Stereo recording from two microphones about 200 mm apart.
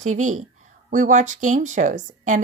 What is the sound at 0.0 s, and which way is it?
Speech, 40° right (ahead or behind).